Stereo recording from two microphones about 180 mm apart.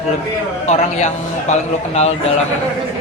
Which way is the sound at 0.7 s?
40° left (ahead or behind).